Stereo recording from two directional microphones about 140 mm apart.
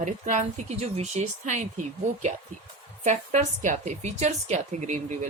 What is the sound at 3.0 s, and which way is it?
Speech, 55° right (ahead or behind).